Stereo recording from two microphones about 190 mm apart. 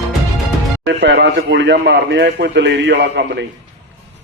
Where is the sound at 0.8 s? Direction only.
65° right (ahead or behind).